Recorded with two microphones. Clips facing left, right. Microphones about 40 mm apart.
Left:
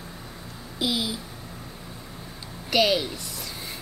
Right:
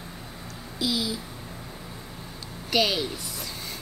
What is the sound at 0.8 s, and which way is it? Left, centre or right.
Speech, left.